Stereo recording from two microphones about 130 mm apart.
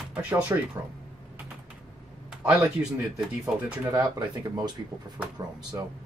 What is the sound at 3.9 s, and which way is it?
Speech, 30° right (ahead or behind).